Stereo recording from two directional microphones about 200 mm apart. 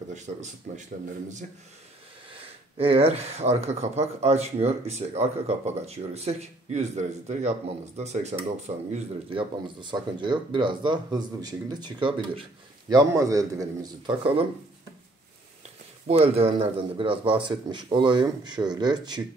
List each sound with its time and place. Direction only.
0.1 s speech: 35° right (ahead or behind)
2.3 s a man's voice: 30° right (ahead or behind)
16.1 s speech: 30° right (ahead or behind)